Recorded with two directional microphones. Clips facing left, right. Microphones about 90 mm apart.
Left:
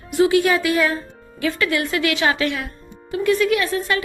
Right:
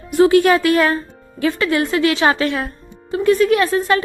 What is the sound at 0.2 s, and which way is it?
Speech, 45° right (ahead or behind).